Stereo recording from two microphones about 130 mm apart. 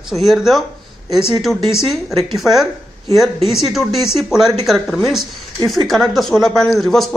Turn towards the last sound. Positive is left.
turn(degrees=0)  # may be behind; listen again after turning